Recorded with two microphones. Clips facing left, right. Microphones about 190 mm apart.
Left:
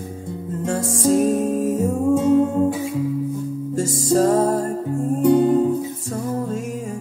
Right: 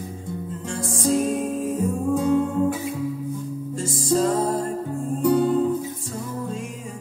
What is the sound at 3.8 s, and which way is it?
Music, 45° left (ahead or behind).